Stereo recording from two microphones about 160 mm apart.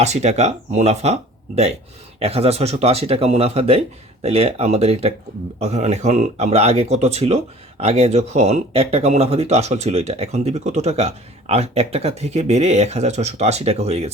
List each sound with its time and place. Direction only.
0.0 s speech: 45° right (ahead or behind)